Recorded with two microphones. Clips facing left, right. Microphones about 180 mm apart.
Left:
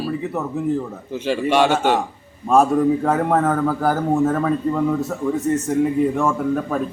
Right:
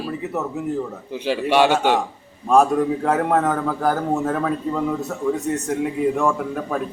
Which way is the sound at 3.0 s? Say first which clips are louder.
Left 1 dB; centre (ahead or behind).